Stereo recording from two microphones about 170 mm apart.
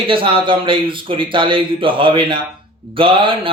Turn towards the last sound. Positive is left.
turn(degrees=-30)  # may be behind; listen again after turning